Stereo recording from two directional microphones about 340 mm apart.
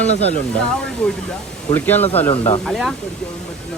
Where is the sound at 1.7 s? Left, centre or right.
Centre.